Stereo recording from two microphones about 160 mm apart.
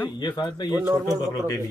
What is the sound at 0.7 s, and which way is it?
Speech, 15° right (ahead or behind).